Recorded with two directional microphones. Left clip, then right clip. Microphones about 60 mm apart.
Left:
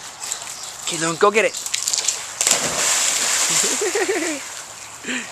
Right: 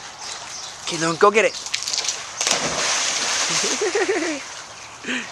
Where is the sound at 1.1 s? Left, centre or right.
Centre.